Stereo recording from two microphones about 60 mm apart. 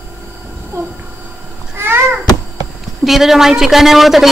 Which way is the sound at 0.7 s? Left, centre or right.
Right.